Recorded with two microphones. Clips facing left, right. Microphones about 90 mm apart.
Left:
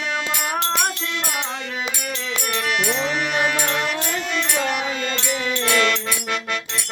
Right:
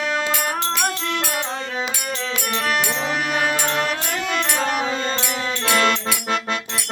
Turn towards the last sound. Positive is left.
turn(degrees=-35)  # may be behind; listen again after turning